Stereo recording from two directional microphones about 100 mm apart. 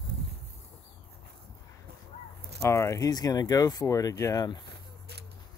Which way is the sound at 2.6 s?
30° left (ahead or behind).